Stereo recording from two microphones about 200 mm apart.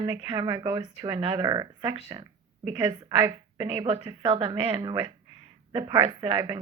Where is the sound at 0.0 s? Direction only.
20° right (ahead or behind).